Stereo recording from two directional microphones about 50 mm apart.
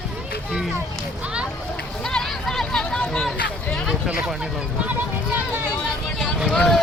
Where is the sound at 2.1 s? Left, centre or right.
Centre.